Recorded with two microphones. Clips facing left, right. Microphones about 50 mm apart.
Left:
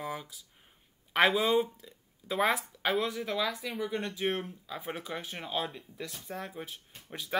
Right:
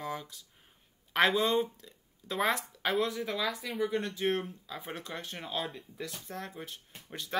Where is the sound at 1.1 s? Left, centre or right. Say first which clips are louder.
Left 1 dB; centre.